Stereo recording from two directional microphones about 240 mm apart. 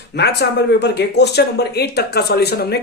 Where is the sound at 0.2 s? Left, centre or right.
Left.